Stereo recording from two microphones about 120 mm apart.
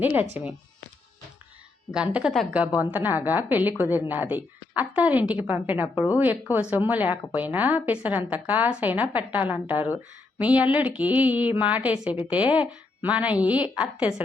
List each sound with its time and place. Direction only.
0.0 s a woman's voice: 15° right (ahead or behind)
1.9 s a woman's voice: 5° right (ahead or behind)